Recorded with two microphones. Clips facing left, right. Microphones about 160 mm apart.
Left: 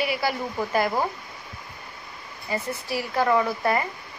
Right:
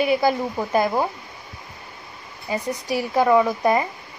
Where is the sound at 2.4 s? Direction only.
15° right (ahead or behind).